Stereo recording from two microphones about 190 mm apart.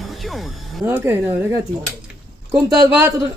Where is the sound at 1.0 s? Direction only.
15° right (ahead or behind).